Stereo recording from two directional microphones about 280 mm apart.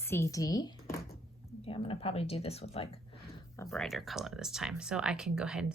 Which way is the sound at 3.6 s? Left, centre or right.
Centre.